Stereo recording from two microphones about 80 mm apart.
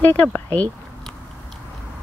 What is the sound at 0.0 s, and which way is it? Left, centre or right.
Speech, left.